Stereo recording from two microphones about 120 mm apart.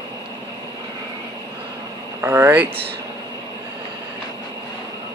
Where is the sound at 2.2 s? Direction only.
15° right (ahead or behind).